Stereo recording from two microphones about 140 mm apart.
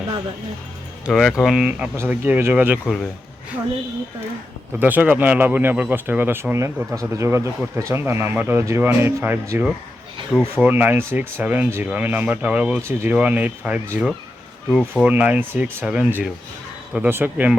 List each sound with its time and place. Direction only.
1.0 s speech: centre (ahead or behind)
2.8 s speech: centre (ahead or behind)
4.8 s speech: 10° right (ahead or behind)